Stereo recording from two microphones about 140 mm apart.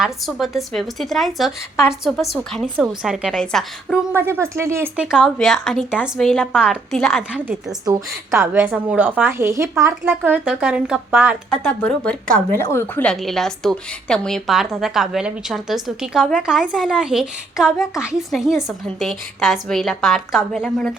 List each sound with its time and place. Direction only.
0.0 s a woman's voice: centre (ahead or behind)
4.1 s speech: 20° right (ahead or behind)
5.1 s a woman's voice: centre (ahead or behind)
7.9 s speech: 20° right (ahead or behind)
11.5 s speech: 5° left (ahead or behind)
12.5 s speech: 20° left (ahead or behind)
13.1 s a woman's voice: centre (ahead or behind)